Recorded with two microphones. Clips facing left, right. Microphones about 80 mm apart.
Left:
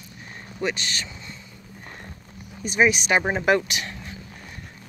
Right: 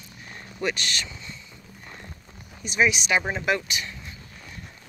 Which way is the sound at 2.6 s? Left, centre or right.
Left.